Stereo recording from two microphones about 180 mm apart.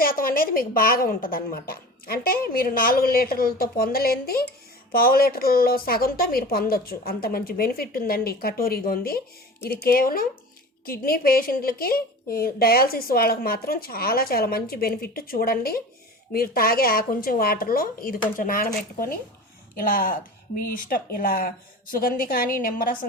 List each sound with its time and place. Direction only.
0.0 s a woman's voice: 55° left (ahead or behind)